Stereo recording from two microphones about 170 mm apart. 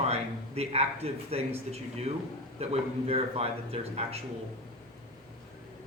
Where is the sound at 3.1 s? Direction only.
35° right (ahead or behind).